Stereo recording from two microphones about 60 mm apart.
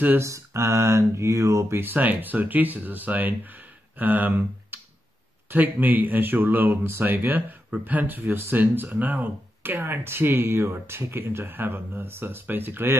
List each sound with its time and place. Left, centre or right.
0.2 s speech: right
1.8 s speech: right